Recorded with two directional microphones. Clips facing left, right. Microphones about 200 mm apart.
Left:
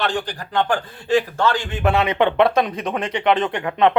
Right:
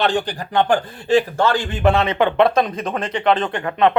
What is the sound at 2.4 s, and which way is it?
Speech, 10° left (ahead or behind).